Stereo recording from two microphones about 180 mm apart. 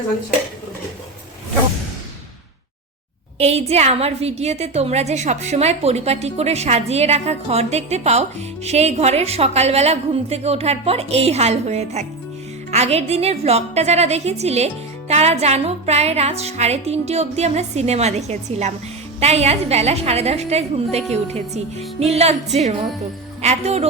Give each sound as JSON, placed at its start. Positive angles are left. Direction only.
{"t": 3.3, "sound": "a woman's voice", "side_deg": -35}
{"t": 23.4, "sound": "a woman's voice", "side_deg": -35}